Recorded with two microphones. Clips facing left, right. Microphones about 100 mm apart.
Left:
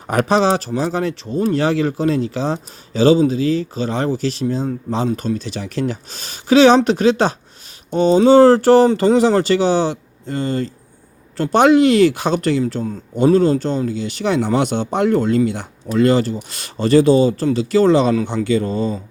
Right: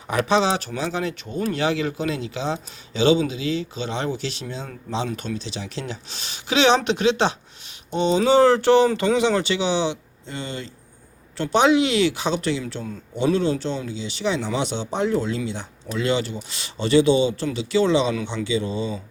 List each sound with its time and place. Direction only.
0.1 s speech: 45° left (ahead or behind)